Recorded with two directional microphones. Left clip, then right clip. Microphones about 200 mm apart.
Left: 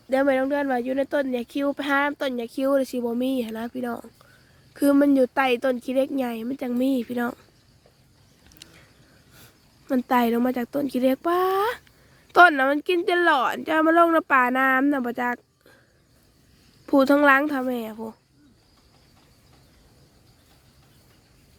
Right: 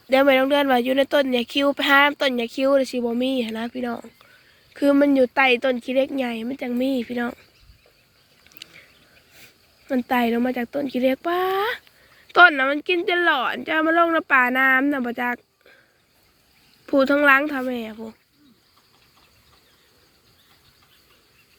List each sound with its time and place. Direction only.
0.1 s speech: 5° left (ahead or behind); by 7.3 s 25° left (ahead or behind)
8.6 s a sound: 25° left (ahead or behind)
9.4 s speech: 25° left (ahead or behind)
16.8 s speech: 25° left (ahead or behind)